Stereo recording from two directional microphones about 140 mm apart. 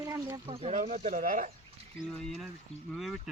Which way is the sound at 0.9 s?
65° right (ahead or behind).